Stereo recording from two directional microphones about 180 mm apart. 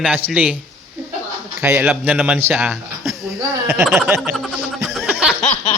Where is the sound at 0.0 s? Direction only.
5° right (ahead or behind).